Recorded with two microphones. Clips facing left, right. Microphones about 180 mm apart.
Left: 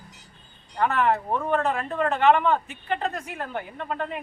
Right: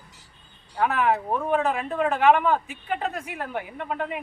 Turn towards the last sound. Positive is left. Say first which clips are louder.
# right 1 dB
turn(degrees=-5)  # may be behind; listen again after turning